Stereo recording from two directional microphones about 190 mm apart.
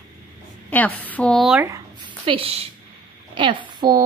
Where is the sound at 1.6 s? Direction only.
20° right (ahead or behind).